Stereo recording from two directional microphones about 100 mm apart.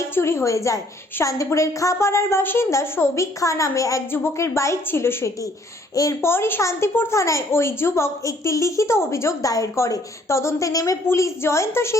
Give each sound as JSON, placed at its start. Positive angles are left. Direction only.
{"t": 0.0, "sound": "a woman's voice", "side_deg": 25}